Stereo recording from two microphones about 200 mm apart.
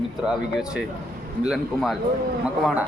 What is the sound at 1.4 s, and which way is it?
Speech, centre (ahead or behind).